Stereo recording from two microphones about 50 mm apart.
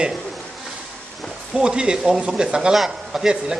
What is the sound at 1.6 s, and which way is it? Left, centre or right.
A man's voice, centre.